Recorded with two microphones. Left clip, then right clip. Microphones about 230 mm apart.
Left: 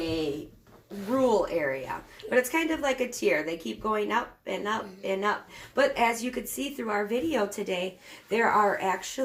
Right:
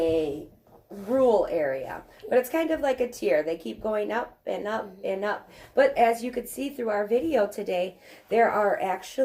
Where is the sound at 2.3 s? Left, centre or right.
Centre.